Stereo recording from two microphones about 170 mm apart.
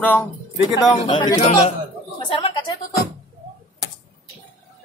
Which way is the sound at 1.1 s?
30° left (ahead or behind).